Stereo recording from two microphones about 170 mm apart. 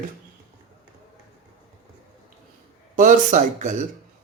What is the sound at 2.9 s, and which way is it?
Speech, 45° right (ahead or behind).